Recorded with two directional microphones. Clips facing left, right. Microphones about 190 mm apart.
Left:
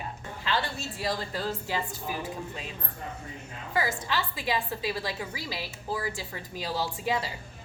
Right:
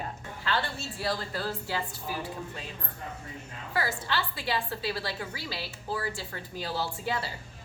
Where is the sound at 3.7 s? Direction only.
20° left (ahead or behind).